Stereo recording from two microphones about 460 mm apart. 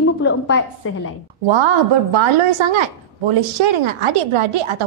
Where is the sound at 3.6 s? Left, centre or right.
Right.